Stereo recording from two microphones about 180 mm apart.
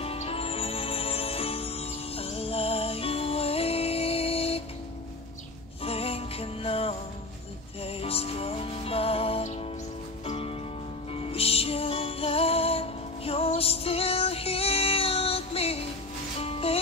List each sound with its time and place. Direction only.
0.0 s music: 30° left (ahead or behind)
5.9 s music: 35° left (ahead or behind)